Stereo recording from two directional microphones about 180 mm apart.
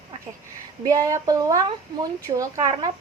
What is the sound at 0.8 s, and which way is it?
Speech, 20° right (ahead or behind).